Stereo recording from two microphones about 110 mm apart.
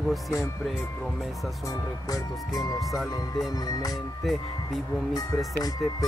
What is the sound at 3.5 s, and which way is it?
Speech, 35° left (ahead or behind).